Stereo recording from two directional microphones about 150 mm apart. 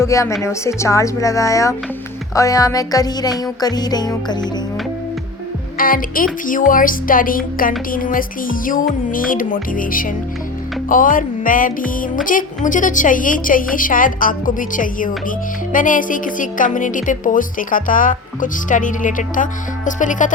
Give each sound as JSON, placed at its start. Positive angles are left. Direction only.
{"t": 0.0, "sound": "music", "side_deg": 20}
{"t": 5.7, "sound": "music", "side_deg": 70}
{"t": 10.8, "sound": "a woman's voice", "side_deg": 65}